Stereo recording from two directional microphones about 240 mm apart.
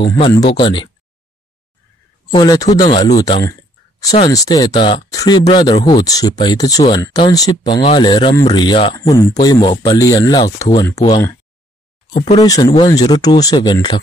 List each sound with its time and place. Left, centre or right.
0.0 s speech: centre
2.3 s speech: centre
12.4 s speech: centre